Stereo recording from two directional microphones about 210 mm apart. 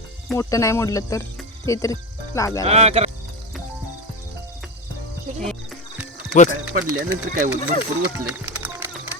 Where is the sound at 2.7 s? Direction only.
30° right (ahead or behind).